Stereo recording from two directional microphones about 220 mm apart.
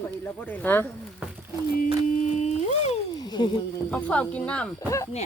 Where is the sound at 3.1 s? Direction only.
20° left (ahead or behind).